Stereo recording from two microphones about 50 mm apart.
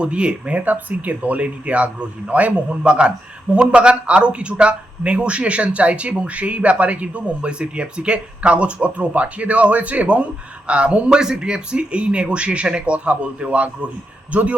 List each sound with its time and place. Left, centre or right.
0.0 s a man's voice: right